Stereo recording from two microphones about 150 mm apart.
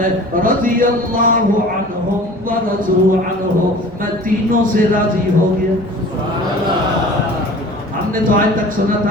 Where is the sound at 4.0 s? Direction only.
65° right (ahead or behind).